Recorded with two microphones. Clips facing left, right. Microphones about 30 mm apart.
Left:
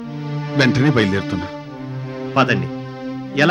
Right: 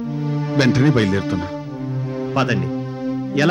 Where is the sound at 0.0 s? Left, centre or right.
Left.